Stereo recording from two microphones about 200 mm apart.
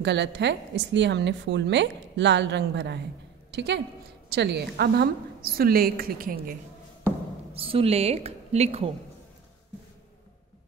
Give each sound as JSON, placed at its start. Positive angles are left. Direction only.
{"t": 0.0, "sound": "a woman's voice", "side_deg": -60}
{"t": 7.5, "sound": "a woman's voice", "side_deg": -30}